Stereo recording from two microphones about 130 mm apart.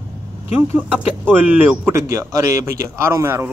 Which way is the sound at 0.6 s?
10° right (ahead or behind).